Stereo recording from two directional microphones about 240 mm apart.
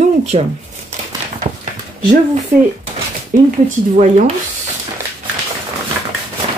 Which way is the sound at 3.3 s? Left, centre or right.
Right.